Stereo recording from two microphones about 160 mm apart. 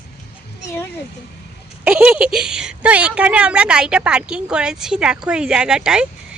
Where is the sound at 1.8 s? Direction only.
5° right (ahead or behind).